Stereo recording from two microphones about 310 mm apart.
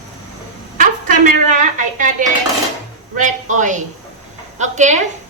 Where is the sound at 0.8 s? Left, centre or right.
Right.